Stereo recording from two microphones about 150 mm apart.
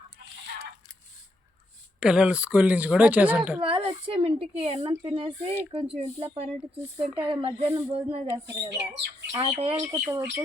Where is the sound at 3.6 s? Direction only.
35° right (ahead or behind).